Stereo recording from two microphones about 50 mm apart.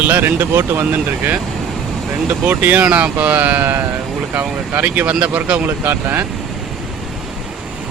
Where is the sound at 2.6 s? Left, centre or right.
Right.